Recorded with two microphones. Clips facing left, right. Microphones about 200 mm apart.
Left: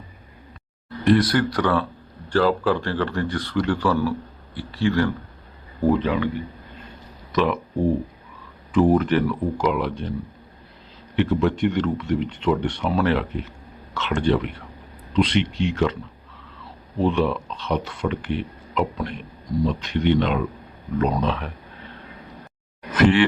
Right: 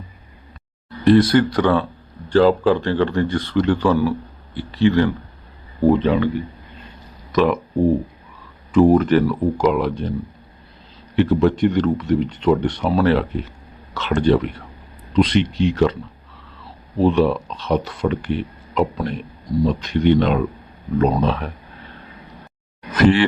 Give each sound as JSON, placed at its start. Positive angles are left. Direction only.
{"t": 1.0, "sound": "a man's voice", "side_deg": -25}
{"t": 7.3, "sound": "speech", "side_deg": -45}
{"t": 8.7, "sound": "speech", "side_deg": -45}
{"t": 11.2, "sound": "speech", "side_deg": -40}
{"t": 17.0, "sound": "speech", "side_deg": -40}
{"t": 23.0, "sound": "speech", "side_deg": -35}